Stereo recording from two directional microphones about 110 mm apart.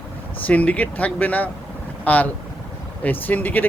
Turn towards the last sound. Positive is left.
turn(degrees=15)  # may be behind; listen again after turning